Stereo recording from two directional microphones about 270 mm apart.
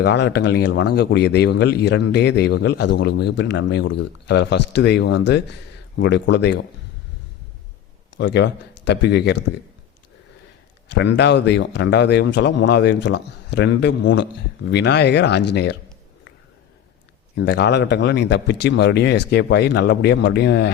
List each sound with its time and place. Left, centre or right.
0.0 s speech: left
8.1 s speech: left
10.8 s speech: left
17.3 s speech: left